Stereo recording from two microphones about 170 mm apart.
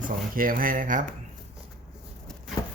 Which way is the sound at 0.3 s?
55° right (ahead or behind).